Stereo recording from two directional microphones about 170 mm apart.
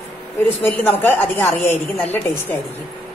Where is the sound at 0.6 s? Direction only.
10° left (ahead or behind).